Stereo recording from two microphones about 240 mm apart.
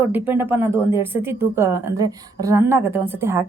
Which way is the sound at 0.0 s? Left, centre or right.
Centre.